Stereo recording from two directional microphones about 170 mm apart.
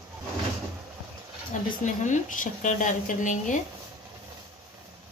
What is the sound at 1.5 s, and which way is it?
A woman's voice, 50° left (ahead or behind).